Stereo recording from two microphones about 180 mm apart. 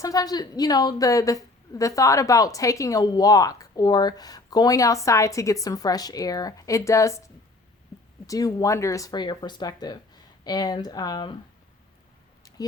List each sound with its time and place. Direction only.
0.0 s a woman's voice: 20° left (ahead or behind)
8.3 s a woman's voice: 20° left (ahead or behind)
12.5 s a sound: 20° left (ahead or behind)